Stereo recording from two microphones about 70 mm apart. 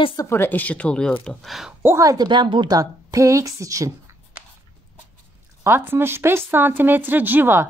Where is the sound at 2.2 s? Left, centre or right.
Right.